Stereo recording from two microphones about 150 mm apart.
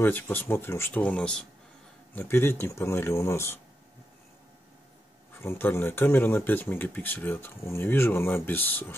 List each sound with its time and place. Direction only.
0.0 s speech: 15° left (ahead or behind)
5.4 s speech: 15° left (ahead or behind)